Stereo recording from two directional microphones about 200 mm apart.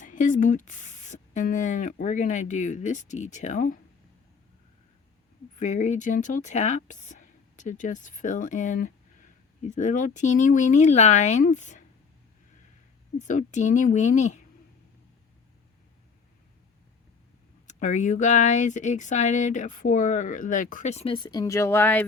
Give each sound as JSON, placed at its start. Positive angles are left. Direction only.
{"t": 0.0, "sound": "speech", "side_deg": 40}
{"t": 5.5, "sound": "speech", "side_deg": 35}
{"t": 13.1, "sound": "speech", "side_deg": 40}
{"t": 17.7, "sound": "speech", "side_deg": 40}